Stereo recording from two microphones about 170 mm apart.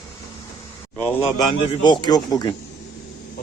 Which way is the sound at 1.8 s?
25° left (ahead or behind).